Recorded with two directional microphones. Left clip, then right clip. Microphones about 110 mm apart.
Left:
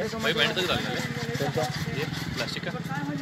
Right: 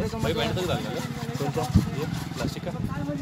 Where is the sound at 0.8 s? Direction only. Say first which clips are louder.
Left 2 dB; 15° right (ahead or behind).